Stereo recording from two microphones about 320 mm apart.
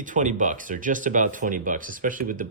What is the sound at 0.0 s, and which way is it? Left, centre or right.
Speech, right.